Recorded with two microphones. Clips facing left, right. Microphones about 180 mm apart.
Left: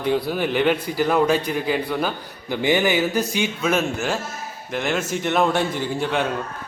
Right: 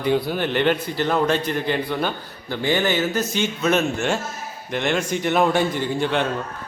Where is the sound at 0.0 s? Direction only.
Centre (ahead or behind).